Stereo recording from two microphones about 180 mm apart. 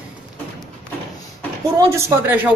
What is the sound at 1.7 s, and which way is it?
Speech, 20° right (ahead or behind).